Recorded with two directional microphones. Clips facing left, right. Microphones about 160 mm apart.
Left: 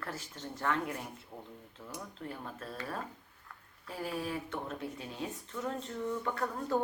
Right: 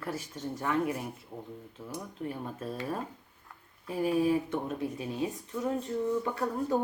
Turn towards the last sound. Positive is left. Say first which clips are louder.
# right 4 dB
turn(degrees=-15)  # may be behind; listen again after turning